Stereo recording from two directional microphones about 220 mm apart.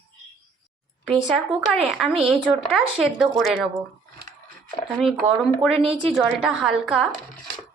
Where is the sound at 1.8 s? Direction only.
Centre (ahead or behind).